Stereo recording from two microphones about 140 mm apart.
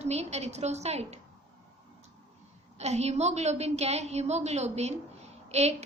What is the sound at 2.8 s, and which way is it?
A woman's voice, 50° right (ahead or behind).